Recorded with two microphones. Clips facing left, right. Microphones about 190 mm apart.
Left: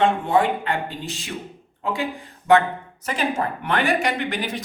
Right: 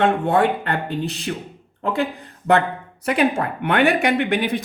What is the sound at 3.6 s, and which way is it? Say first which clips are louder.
Speech: right 5 dB; 60° right (ahead or behind).